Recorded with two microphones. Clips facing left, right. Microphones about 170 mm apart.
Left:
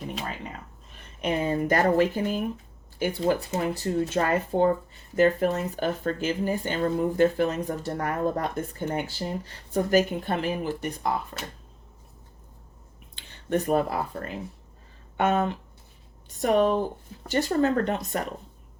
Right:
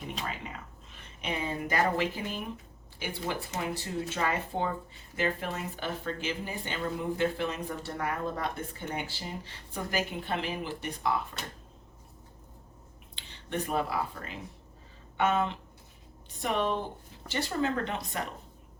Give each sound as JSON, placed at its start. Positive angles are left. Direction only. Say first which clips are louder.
{"t": 1.2, "sound": "speech", "louder": "left 8 dB", "side_deg": 45}
{"t": 13.1, "sound": "speech", "louder": "left 8 dB", "side_deg": 45}